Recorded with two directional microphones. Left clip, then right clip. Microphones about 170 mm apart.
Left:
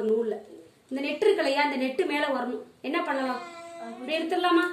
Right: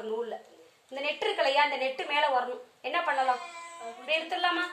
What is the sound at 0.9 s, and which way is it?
A woman's voice, 15° right (ahead or behind).